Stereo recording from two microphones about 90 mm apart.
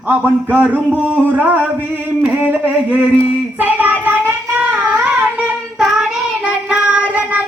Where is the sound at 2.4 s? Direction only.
20° right (ahead or behind).